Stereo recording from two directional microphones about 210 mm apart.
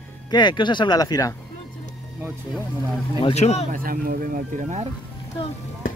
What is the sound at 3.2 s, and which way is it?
Speech, 30° left (ahead or behind).